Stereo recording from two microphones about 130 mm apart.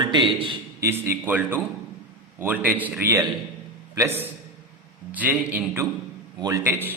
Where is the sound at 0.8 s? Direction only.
20° right (ahead or behind).